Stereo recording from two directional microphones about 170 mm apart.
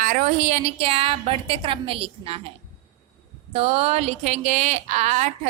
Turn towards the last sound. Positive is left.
turn(degrees=-40)  # may be behind; listen again after turning